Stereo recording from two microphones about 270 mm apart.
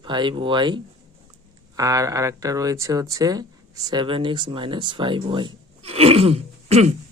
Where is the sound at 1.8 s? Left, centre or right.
Centre.